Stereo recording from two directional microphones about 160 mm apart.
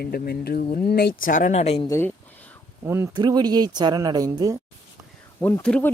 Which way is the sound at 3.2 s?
25° right (ahead or behind).